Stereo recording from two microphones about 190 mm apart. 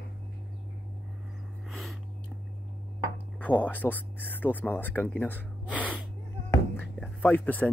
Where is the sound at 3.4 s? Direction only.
10° left (ahead or behind).